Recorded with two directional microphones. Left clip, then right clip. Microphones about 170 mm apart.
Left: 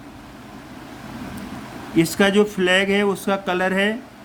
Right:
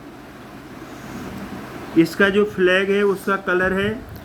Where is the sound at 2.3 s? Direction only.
75° left (ahead or behind).